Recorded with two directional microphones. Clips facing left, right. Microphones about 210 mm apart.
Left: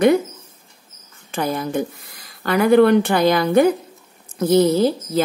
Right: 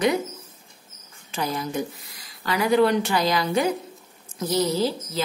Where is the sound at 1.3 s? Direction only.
55° left (ahead or behind).